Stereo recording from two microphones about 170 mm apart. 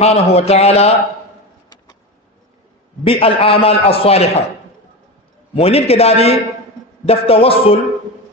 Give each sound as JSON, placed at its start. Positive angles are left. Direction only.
{"t": 0.0, "sound": "a man's voice", "side_deg": 35}
{"t": 3.0, "sound": "a man's voice", "side_deg": 35}
{"t": 5.5, "sound": "a man's voice", "side_deg": 35}